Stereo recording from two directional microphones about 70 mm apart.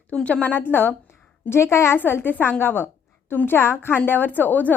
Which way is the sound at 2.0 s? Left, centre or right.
Left.